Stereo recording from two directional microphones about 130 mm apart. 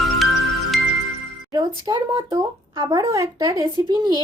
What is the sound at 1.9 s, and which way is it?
Speech, 35° right (ahead or behind).